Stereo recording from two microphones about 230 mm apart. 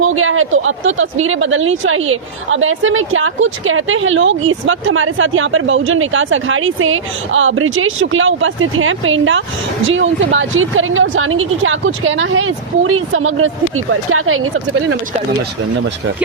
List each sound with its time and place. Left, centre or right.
0.0 s speech: right